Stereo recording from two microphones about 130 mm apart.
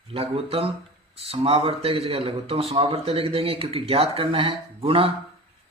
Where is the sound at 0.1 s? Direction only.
45° right (ahead or behind).